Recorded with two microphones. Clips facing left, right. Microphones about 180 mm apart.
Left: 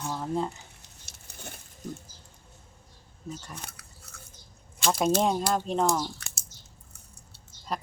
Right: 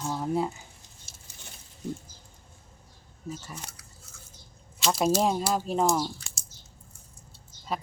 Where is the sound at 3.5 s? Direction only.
60° left (ahead or behind).